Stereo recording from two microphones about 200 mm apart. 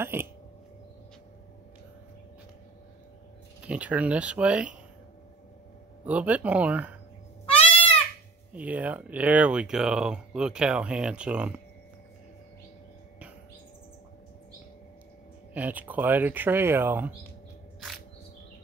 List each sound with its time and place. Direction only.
0.0 s a sound: 10° right (ahead or behind)
3.6 s speech: 5° right (ahead or behind)
6.0 s speech: 5° right (ahead or behind)
7.4 s goat: 30° left (ahead or behind)
8.5 s speech: 5° right (ahead or behind)
15.5 s speech: 10° right (ahead or behind)
17.7 s a sound: centre (ahead or behind)